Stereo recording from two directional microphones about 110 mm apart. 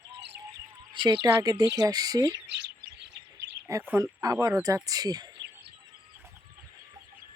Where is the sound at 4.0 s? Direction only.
35° right (ahead or behind).